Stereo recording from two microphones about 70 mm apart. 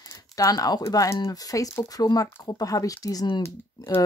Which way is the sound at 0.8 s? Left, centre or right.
Left.